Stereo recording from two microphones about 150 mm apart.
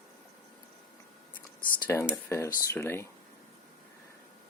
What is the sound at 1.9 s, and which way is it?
Speech, 15° left (ahead or behind).